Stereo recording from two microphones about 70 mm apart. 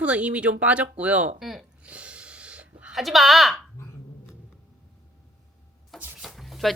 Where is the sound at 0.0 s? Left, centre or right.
Centre.